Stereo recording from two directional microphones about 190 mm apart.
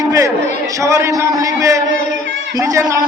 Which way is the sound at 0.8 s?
15° right (ahead or behind).